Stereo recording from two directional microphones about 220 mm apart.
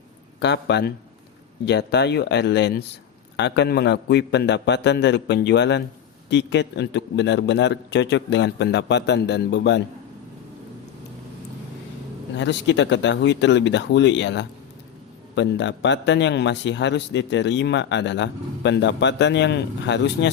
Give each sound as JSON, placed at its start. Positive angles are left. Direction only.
{"t": 0.3, "sound": "speech", "side_deg": 50}
{"t": 12.4, "sound": "speech", "side_deg": 55}